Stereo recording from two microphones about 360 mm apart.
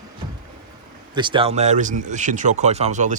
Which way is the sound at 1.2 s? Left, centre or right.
Centre.